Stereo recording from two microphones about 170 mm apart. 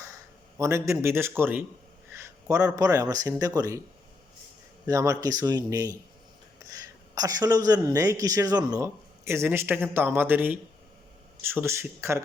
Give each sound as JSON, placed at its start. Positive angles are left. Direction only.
{"t": 0.6, "sound": "speech", "side_deg": -15}
{"t": 4.9, "sound": "a man's voice", "side_deg": -20}
{"t": 7.2, "sound": "speech", "side_deg": -20}